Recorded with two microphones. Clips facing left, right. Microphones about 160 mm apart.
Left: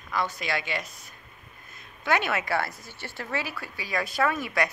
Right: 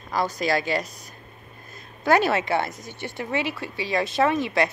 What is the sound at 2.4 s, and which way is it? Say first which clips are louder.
A woman's voice: right 4 dB; 20° right (ahead or behind).